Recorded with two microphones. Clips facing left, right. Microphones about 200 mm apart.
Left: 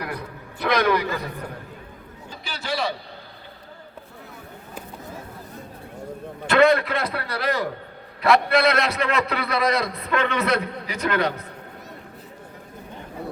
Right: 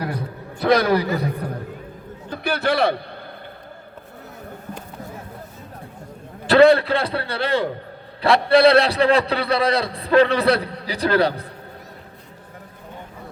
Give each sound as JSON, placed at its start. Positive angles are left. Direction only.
{"t": 0.0, "sound": "a sound", "side_deg": -30}
{"t": 2.3, "sound": "a man's voice", "side_deg": -60}
{"t": 6.5, "sound": "a man's voice", "side_deg": -35}